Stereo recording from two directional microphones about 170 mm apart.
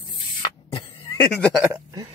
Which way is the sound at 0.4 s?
30° left (ahead or behind).